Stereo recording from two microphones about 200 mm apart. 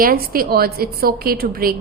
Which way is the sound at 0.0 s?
45° right (ahead or behind).